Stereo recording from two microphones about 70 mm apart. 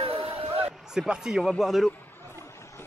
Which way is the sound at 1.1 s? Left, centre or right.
Centre.